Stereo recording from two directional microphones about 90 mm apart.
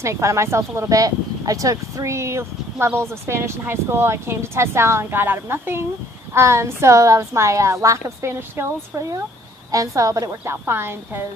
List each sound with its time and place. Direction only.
0.0 s speech: 35° right (ahead or behind)
9.7 s speech: 40° right (ahead or behind)